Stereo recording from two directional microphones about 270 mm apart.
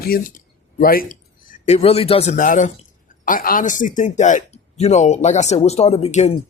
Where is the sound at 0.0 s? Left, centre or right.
Left.